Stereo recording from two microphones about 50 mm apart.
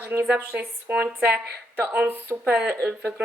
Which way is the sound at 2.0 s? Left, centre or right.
Right.